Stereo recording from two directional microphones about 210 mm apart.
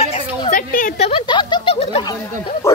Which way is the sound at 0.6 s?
40° left (ahead or behind).